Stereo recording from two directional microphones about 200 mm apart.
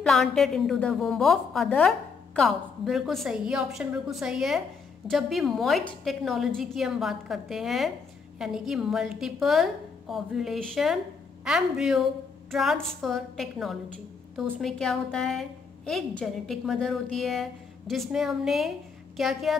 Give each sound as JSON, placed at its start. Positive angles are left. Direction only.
{"t": 0.0, "sound": "a woman's voice", "side_deg": 0}